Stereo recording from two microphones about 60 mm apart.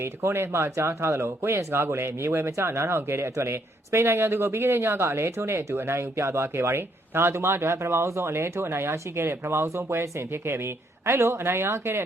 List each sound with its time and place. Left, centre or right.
0.0 s speech: right